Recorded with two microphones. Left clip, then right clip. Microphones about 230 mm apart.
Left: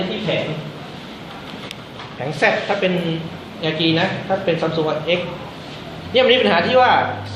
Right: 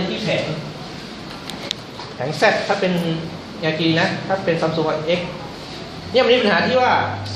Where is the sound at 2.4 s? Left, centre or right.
Centre.